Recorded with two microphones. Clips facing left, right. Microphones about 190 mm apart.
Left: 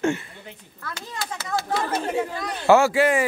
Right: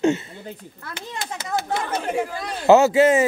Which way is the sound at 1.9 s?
25° right (ahead or behind).